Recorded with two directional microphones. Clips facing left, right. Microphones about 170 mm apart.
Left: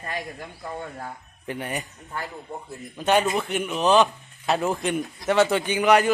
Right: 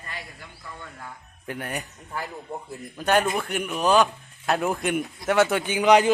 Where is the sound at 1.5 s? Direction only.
Centre (ahead or behind).